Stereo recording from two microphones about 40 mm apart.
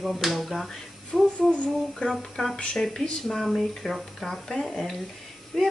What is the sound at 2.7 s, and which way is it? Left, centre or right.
Speech, centre.